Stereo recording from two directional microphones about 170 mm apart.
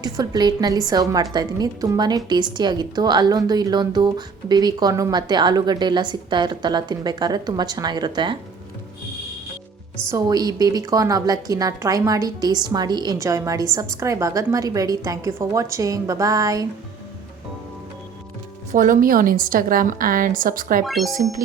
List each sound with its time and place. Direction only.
0.0 s a woman's voice: 25° right (ahead or behind)
10.1 s a woman's voice: 20° right (ahead or behind)
18.7 s a woman's voice: 50° right (ahead or behind)
20.8 s speech: centre (ahead or behind)